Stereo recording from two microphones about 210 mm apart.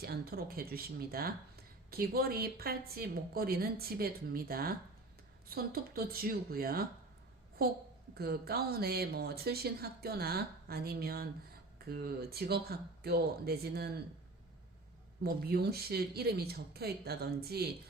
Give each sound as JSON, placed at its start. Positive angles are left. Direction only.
{"t": 0.0, "sound": "speech", "side_deg": -45}
{"t": 15.2, "sound": "speech", "side_deg": -50}